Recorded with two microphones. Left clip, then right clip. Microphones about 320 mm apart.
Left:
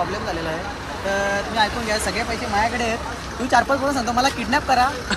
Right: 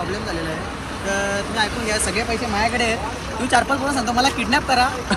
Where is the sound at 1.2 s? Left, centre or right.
Centre.